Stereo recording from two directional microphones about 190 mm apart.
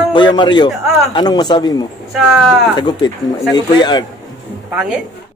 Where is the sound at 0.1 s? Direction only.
25° left (ahead or behind).